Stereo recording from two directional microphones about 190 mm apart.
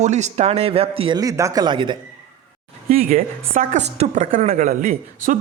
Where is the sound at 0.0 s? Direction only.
40° right (ahead or behind).